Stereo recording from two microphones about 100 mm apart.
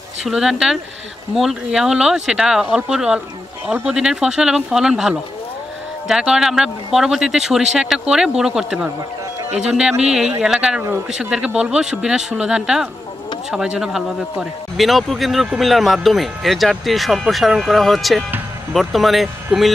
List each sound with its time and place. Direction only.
0.2 s a man's voice: 5° right (ahead or behind)
9.5 s a man's voice: 90° right
10.4 s a man's voice: 5° right (ahead or behind)